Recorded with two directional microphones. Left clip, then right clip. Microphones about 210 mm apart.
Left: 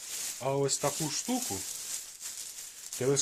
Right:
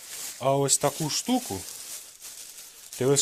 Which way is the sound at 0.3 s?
50° right (ahead or behind).